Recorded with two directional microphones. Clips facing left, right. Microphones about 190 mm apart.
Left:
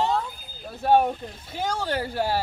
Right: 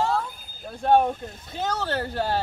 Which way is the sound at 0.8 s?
10° left (ahead or behind).